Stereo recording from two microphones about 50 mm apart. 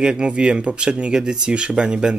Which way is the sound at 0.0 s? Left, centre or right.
Centre.